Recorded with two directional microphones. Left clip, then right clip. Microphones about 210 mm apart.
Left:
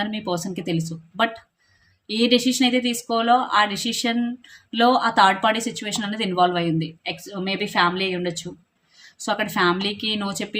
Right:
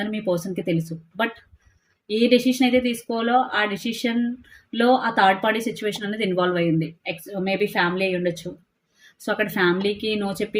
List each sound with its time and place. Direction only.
0.0 s speech: 20° left (ahead or behind)